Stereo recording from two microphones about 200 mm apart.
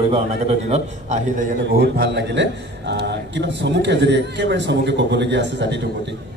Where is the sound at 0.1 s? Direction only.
30° right (ahead or behind); by 6.1 s 60° right (ahead or behind).